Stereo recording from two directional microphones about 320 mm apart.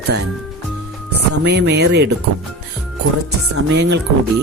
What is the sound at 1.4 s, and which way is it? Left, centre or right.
Speech, right.